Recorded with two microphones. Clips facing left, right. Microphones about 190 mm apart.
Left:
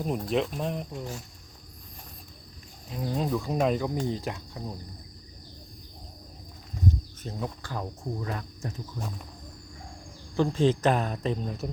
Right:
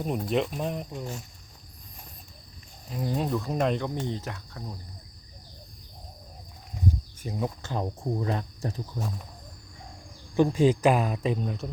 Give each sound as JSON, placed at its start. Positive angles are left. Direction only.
{"t": 0.0, "sound": "speech", "side_deg": 0}
{"t": 2.9, "sound": "speech", "side_deg": 0}
{"t": 7.2, "sound": "speech", "side_deg": -15}
{"t": 10.3, "sound": "speech", "side_deg": -15}